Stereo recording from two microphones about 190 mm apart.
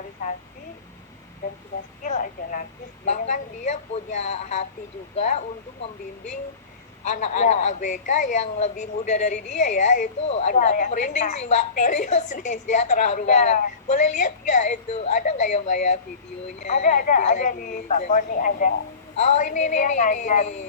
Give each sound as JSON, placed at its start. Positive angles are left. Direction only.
{"t": 2.0, "sound": "a woman's voice", "side_deg": 40}
{"t": 7.0, "sound": "a woman's voice", "side_deg": 35}